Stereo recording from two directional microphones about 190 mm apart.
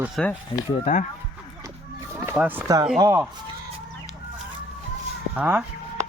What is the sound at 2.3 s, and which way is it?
Speech, 5° right (ahead or behind).